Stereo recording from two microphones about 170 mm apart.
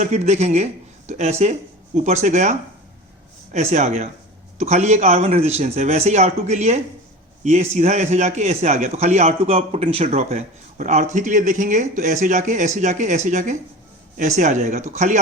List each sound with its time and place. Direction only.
0.0 s a man's voice: 40° right (ahead or behind)